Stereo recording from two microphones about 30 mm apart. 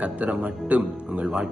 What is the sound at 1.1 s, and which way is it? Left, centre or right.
Speech, right.